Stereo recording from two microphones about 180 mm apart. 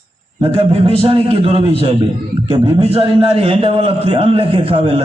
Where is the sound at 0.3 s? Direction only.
35° right (ahead or behind).